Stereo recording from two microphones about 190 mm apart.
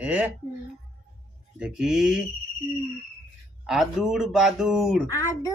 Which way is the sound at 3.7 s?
Centre (ahead or behind).